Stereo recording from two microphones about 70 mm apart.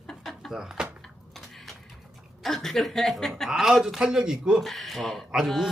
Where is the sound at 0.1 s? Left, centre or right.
Centre.